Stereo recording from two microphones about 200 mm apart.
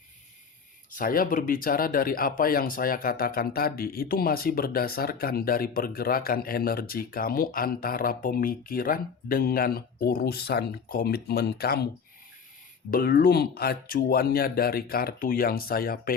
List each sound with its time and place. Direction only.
0.9 s speech: 45° left (ahead or behind)
12.9 s speech: 50° left (ahead or behind)